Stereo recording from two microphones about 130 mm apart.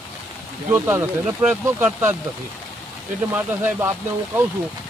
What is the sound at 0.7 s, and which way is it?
Speech, 15° right (ahead or behind).